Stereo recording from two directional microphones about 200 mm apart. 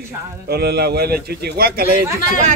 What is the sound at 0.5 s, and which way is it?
A man's voice, 50° right (ahead or behind).